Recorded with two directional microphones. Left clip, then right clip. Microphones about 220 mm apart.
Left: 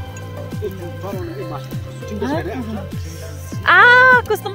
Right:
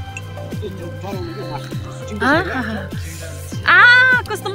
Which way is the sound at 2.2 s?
Centre (ahead or behind).